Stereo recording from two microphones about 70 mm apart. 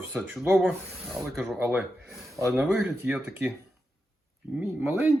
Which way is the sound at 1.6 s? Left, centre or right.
Centre.